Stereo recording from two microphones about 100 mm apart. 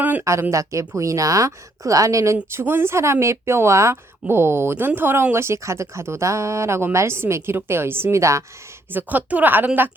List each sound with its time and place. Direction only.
0.0 s a sound: 15° right (ahead or behind)
0.5 s a woman's voice: 30° right (ahead or behind)
8.9 s a woman's voice: 20° right (ahead or behind)